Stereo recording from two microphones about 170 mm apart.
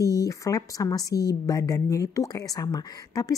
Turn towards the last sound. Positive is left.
turn(degrees=20)  # may be behind; listen again after turning